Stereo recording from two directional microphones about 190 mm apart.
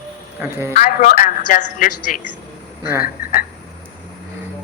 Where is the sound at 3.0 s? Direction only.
50° left (ahead or behind).